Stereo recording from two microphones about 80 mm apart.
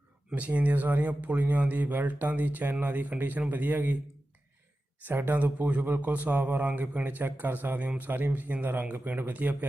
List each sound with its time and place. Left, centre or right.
0.3 s a man's voice: centre
5.0 s a man's voice: right